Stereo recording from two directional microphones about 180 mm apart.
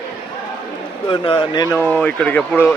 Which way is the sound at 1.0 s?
25° left (ahead or behind).